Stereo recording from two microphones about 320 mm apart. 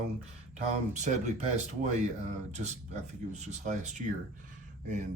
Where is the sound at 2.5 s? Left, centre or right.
Right.